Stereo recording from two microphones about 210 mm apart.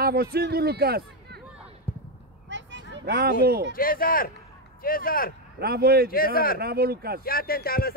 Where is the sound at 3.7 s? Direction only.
45° left (ahead or behind).